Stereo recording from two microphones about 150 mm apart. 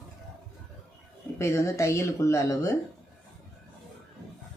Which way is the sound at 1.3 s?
20° left (ahead or behind).